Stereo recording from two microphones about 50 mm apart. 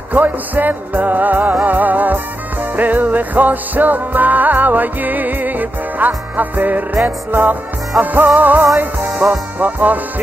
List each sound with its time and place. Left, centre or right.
0.1 s music: right